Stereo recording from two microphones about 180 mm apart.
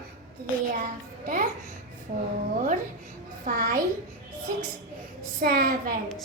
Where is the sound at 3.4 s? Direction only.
50° right (ahead or behind).